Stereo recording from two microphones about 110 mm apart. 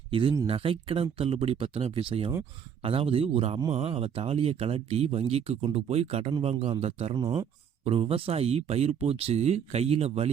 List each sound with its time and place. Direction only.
0.1 s speech: 50° right (ahead or behind); by 7.1 s 70° right (ahead or behind)
7.1 s speech: 45° right (ahead or behind)
7.9 s speech: 55° right (ahead or behind)